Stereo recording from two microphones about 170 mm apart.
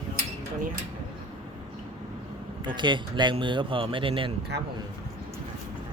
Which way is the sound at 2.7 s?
25° right (ahead or behind).